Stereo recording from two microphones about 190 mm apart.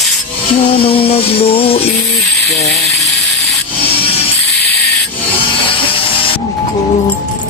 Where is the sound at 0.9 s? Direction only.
30° left (ahead or behind).